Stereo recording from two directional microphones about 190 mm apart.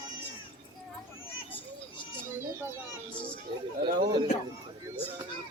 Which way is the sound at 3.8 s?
55° right (ahead or behind).